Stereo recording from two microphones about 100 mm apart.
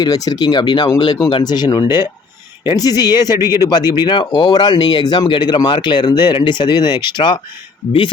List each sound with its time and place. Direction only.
0.0 s speech: 40° left (ahead or behind)
3.4 s speech: 25° right (ahead or behind)
4.0 s speech: 50° left (ahead or behind)